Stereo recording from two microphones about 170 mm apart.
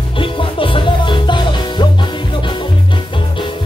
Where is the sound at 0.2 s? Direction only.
30° left (ahead or behind).